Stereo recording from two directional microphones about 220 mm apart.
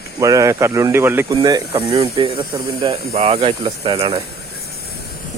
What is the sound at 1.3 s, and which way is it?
Speech, 20° right (ahead or behind).